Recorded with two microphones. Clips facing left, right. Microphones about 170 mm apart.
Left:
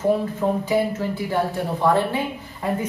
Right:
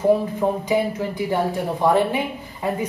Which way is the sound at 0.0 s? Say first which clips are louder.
Right 2 dB; 15° right (ahead or behind).